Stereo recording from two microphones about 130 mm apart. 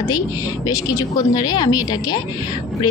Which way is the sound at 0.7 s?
30° left (ahead or behind).